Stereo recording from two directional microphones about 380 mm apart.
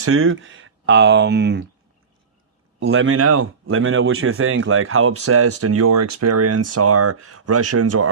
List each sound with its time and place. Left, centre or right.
0.0 s speech: right
2.8 s speech: right